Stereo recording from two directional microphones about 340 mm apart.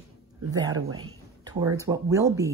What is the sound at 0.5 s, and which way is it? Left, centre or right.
Speech, centre.